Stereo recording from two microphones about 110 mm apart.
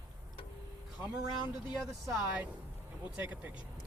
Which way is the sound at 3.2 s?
15° right (ahead or behind).